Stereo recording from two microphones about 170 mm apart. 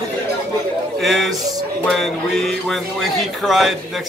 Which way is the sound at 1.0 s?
Centre (ahead or behind).